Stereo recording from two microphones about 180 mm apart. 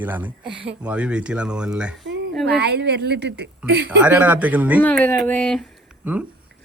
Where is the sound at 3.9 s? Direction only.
10° right (ahead or behind).